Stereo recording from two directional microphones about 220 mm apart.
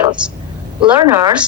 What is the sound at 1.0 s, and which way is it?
Speech, 15° right (ahead or behind).